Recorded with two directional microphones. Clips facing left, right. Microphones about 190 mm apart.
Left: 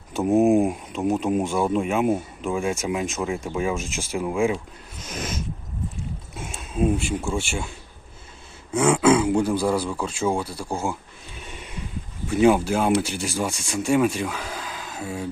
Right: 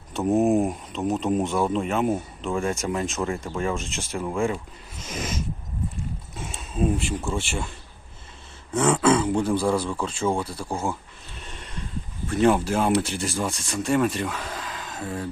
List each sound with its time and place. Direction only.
0.1 s speech: 10° left (ahead or behind)
8.7 s speech: 5° left (ahead or behind)
11.3 s a sound: 5° left (ahead or behind)
12.3 s speech: 5° left (ahead or behind)